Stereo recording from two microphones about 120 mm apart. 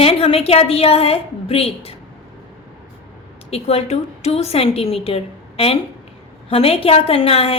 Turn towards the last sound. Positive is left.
turn(degrees=55)  # may be behind; listen again after turning